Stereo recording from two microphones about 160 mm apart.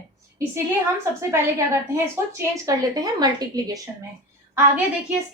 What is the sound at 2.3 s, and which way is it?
A woman's voice, 20° right (ahead or behind).